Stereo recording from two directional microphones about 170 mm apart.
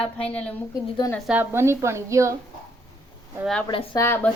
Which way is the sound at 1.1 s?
5° right (ahead or behind).